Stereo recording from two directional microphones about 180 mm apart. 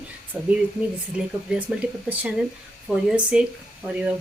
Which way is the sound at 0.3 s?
10° right (ahead or behind).